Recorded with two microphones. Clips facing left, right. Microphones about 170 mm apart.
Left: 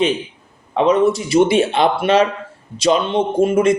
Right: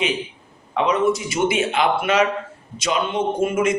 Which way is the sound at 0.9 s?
35° left (ahead or behind).